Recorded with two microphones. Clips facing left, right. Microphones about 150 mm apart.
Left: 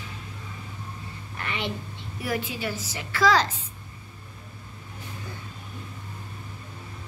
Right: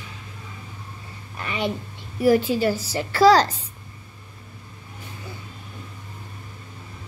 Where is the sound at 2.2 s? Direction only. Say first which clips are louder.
Right 12 dB; 35° right (ahead or behind).